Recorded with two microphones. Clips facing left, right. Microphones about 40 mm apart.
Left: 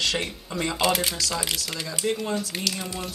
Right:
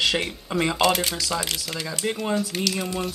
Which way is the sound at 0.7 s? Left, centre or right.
Centre.